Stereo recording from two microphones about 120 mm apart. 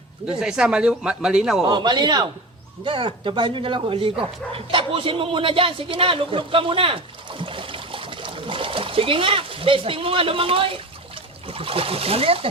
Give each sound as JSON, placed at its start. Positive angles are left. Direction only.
{"t": 0.3, "sound": "speech", "side_deg": -5}
{"t": 1.6, "sound": "speech", "side_deg": -35}